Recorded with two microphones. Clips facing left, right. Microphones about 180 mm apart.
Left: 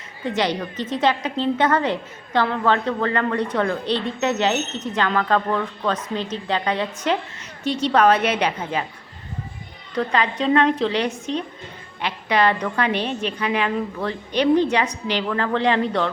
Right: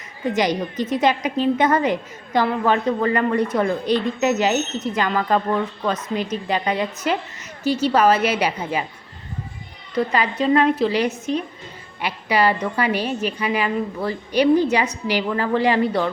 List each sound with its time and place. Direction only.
0.3 s a woman's voice: 10° right (ahead or behind)
9.9 s a woman's voice: 10° right (ahead or behind)